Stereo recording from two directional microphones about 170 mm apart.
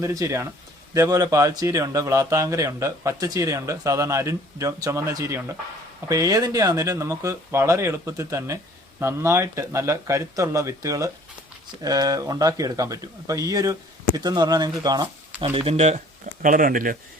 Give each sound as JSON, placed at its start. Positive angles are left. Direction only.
{"t": 0.0, "sound": "speech", "side_deg": -20}
{"t": 15.4, "sound": "speech", "side_deg": -35}
{"t": 16.4, "sound": "speech", "side_deg": -55}